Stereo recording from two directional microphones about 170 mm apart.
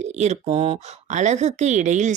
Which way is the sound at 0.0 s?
40° right (ahead or behind).